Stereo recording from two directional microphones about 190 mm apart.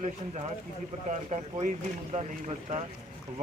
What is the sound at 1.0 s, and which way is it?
Speech, 40° right (ahead or behind).